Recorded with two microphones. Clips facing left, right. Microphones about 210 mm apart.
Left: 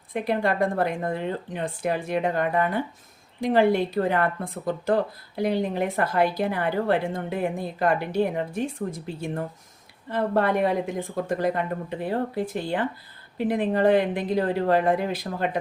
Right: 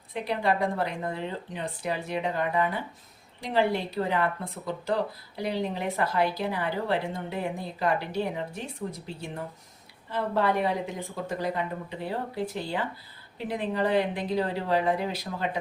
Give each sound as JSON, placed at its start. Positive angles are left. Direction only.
{"t": 0.1, "sound": "speech", "side_deg": 50}
{"t": 13.5, "sound": "speech", "side_deg": 55}